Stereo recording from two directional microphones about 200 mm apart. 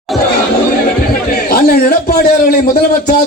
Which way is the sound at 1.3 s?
50° left (ahead or behind).